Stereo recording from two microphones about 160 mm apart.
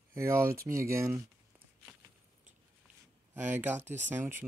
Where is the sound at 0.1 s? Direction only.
15° right (ahead or behind).